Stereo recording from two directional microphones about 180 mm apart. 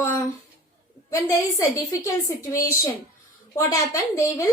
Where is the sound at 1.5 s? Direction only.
15° left (ahead or behind).